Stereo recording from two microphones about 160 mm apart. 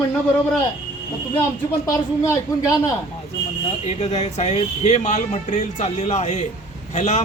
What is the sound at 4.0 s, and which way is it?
A man's voice, 45° left (ahead or behind).